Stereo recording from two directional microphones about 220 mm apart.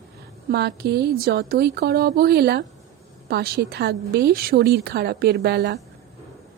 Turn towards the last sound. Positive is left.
turn(degrees=-50)  # may be behind; listen again after turning